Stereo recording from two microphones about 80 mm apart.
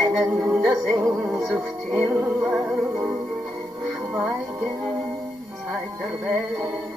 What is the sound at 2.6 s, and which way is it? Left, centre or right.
Music, right.